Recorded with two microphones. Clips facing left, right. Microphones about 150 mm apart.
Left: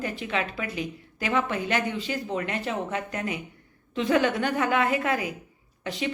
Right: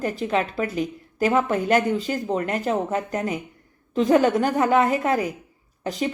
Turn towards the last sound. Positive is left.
turn(degrees=-40)  # may be behind; listen again after turning